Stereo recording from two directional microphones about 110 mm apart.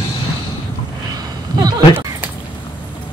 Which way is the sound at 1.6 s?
40° right (ahead or behind).